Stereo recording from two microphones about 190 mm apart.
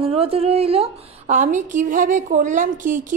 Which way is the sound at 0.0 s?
30° right (ahead or behind).